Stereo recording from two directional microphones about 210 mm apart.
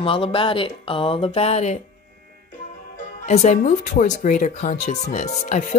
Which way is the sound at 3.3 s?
35° left (ahead or behind).